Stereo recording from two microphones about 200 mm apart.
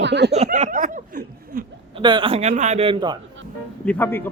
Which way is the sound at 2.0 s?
25° right (ahead or behind).